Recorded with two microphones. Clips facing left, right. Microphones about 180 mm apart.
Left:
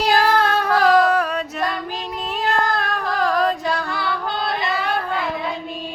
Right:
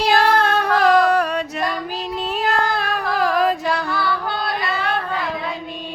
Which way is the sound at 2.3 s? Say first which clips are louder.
Even; 5° right (ahead or behind).